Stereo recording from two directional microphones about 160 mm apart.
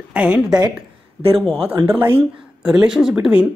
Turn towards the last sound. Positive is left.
turn(degrees=-5)  # may be behind; listen again after turning